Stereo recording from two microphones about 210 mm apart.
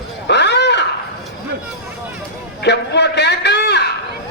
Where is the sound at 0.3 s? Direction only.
55° left (ahead or behind).